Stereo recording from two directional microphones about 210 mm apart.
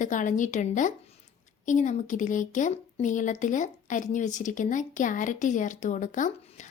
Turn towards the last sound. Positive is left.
turn(degrees=35)  # may be behind; listen again after turning